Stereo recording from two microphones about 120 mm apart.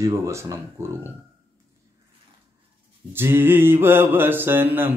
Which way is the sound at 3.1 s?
20° right (ahead or behind).